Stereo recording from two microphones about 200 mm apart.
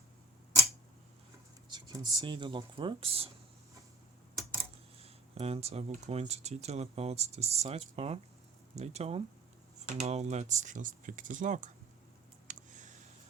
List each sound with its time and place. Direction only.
1.7 s speech: 20° right (ahead or behind)
4.9 s speech: 30° right (ahead or behind)
12.5 s a sound: 40° right (ahead or behind)